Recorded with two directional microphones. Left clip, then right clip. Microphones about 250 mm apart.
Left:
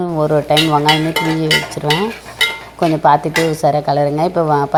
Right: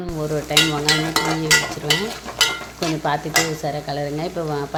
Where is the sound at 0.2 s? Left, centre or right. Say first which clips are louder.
Left 5 dB; centre.